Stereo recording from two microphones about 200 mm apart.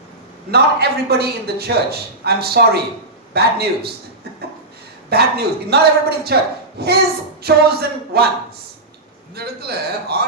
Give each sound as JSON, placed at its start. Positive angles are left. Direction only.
{"t": 0.5, "sound": "a man's voice", "side_deg": -50}
{"t": 5.0, "sound": "a man's voice", "side_deg": -50}
{"t": 9.3, "sound": "a man's voice", "side_deg": -50}